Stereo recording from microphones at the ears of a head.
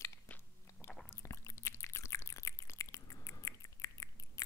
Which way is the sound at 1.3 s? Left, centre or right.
Left.